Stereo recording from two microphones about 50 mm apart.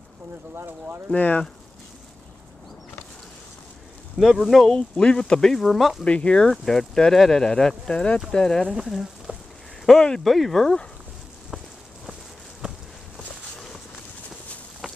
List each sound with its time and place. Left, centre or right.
0.6 s speech: right
1.1 s speech: left
4.2 s speech: centre
4.6 s speech: centre
6.0 s speech: left
6.5 s speech: centre
8.7 s speech: centre
9.3 s a sound: right
9.8 s speech: centre
10.2 s speech: centre
12.6 s walk: centre